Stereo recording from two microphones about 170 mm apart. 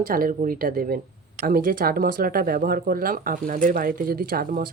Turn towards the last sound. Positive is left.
turn(degrees=-55)  # may be behind; listen again after turning